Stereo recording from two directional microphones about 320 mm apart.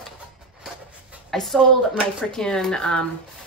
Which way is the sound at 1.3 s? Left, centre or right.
Centre.